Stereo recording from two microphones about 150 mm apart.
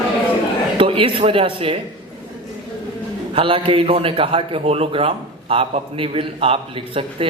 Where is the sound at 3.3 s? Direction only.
35° right (ahead or behind).